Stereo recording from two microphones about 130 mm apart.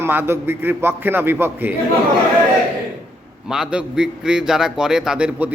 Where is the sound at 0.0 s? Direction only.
15° right (ahead or behind).